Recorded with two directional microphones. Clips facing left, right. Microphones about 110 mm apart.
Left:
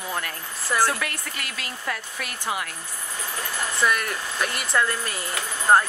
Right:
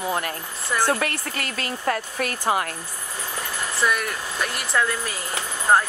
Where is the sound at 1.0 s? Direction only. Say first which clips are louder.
Right 5 dB; 45° right (ahead or behind).